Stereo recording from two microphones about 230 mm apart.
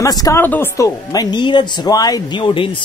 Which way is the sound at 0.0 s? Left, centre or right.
Centre.